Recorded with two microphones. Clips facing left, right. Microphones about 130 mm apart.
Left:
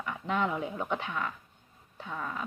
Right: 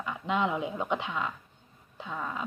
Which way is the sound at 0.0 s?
20° right (ahead or behind).